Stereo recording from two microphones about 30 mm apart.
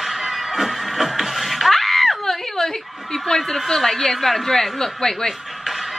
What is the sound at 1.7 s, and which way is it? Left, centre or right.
Screaming, centre.